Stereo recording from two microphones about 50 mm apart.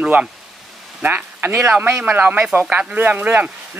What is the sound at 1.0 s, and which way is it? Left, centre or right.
Speech, right.